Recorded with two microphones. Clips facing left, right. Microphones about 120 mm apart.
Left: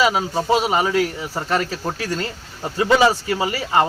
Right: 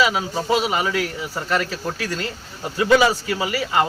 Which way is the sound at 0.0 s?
30° left (ahead or behind).